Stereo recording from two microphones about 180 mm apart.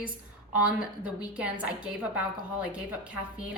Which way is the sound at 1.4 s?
5° right (ahead or behind).